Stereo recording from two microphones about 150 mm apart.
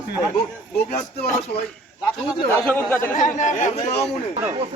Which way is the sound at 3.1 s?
55° left (ahead or behind).